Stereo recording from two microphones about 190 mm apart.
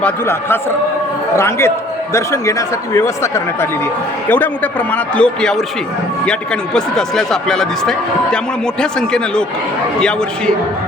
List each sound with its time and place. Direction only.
0.0 s speech: 10° left (ahead or behind)
6.7 s speech: centre (ahead or behind)